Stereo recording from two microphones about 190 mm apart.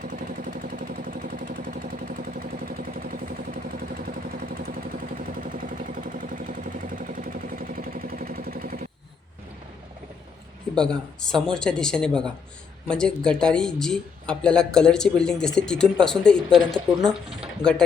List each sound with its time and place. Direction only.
0.0 s vehicle: 45° right (ahead or behind)
10.8 s speech: 5° left (ahead or behind)